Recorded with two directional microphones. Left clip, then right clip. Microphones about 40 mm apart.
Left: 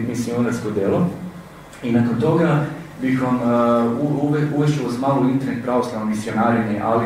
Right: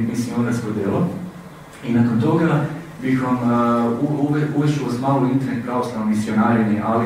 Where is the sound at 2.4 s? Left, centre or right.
Centre.